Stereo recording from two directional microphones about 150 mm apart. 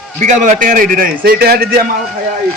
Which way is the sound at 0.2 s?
55° right (ahead or behind).